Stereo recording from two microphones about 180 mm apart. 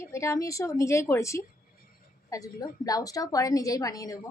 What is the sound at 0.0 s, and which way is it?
A woman's voice, 15° left (ahead or behind).